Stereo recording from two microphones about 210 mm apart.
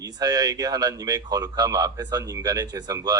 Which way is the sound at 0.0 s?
20° right (ahead or behind).